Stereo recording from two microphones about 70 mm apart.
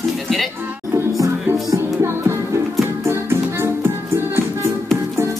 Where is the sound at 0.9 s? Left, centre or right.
Right.